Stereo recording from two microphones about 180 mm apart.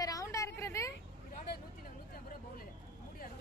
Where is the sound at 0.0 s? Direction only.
20° left (ahead or behind).